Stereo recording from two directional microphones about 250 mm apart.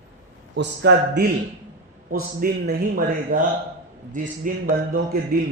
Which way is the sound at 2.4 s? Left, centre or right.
Right.